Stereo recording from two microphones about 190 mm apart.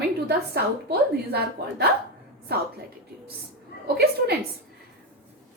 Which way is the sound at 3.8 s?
55° right (ahead or behind).